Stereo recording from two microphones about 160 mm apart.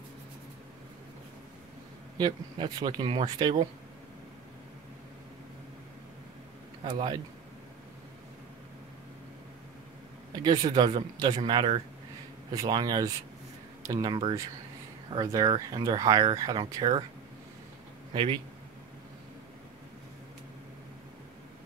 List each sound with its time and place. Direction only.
2.1 s speech: 25° right (ahead or behind)
6.8 s speech: 30° right (ahead or behind)
10.3 s speech: 25° right (ahead or behind)